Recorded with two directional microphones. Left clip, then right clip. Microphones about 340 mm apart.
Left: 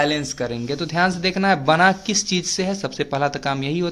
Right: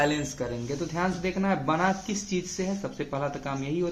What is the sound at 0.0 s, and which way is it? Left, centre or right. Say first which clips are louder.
A man's voice: left 6 dB; left.